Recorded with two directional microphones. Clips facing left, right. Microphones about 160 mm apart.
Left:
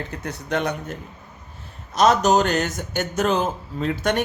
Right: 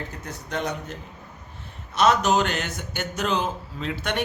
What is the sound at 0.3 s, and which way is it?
Speech, 65° left (ahead or behind).